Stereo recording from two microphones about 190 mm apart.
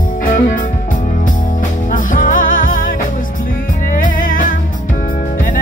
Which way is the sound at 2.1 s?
45° left (ahead or behind).